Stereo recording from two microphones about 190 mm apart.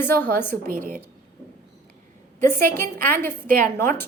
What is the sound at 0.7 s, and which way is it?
Speech, 45° right (ahead or behind).